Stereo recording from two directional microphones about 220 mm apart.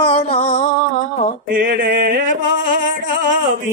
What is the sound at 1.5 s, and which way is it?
Mantra, 40° right (ahead or behind).